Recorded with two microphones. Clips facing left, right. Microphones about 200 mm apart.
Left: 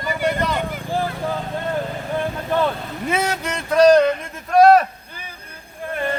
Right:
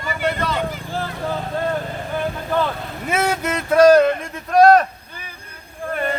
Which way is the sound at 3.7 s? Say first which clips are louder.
Right 1 dB; 5° right (ahead or behind).